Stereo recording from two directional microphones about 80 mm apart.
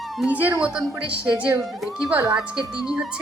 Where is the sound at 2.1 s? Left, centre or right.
Right.